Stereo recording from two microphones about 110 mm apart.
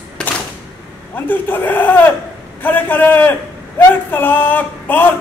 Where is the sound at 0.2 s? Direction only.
5° left (ahead or behind).